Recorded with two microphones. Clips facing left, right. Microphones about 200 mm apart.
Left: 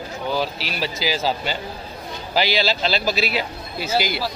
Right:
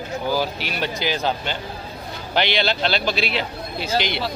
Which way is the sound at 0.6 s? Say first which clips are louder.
Even; centre (ahead or behind).